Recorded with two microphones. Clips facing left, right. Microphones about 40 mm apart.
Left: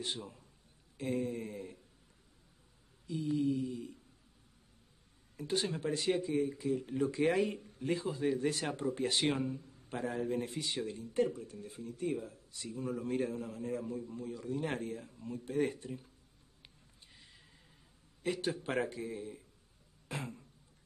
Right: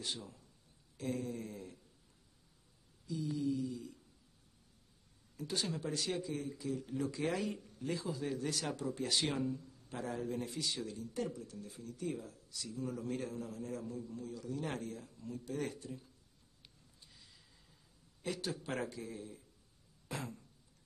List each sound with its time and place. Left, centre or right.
0.0 s a man's voice: left
3.1 s speech: left
5.4 s speech: left
16.6 s a sound: left
18.2 s speech: left
20.1 s a sound: left